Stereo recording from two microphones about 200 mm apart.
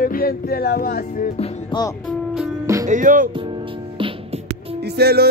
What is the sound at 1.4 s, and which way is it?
Music, 25° left (ahead or behind).